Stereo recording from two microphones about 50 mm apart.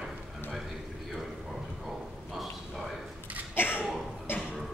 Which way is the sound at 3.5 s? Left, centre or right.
Left.